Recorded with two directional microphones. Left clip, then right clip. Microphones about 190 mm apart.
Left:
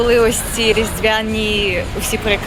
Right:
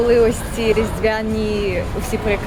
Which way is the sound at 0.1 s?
5° right (ahead or behind).